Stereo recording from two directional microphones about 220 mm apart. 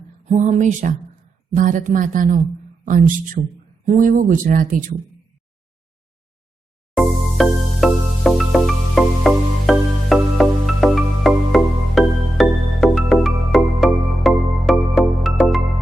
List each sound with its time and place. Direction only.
0.3 s speech: 30° right (ahead or behind)
6.9 s music: centre (ahead or behind)